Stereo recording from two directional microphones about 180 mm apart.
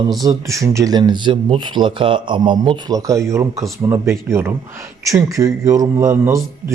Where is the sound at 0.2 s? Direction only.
20° right (ahead or behind).